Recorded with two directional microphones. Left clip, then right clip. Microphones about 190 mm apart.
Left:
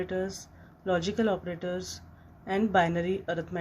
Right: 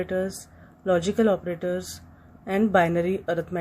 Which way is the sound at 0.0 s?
45° right (ahead or behind).